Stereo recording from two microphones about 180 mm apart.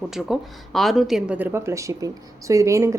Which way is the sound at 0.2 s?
Centre (ahead or behind).